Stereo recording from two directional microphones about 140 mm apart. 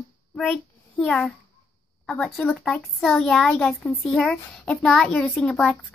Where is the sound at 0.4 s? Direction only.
5° left (ahead or behind).